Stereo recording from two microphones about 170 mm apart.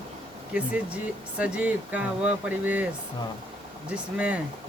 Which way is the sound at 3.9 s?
10° right (ahead or behind).